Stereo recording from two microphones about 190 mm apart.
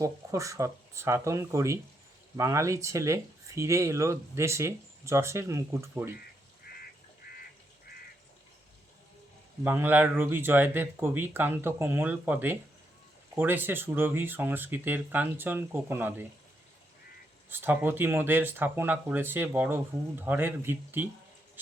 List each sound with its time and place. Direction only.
0.0 s speech: 15° right (ahead or behind)
7.2 s duck: 60° left (ahead or behind)
9.6 s speech: 10° right (ahead or behind)
17.5 s speech: 10° right (ahead or behind)